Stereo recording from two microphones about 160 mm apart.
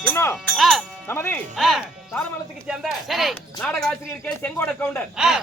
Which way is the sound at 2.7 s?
Centre (ahead or behind).